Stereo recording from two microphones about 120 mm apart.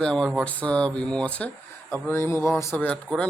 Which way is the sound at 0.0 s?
5° left (ahead or behind).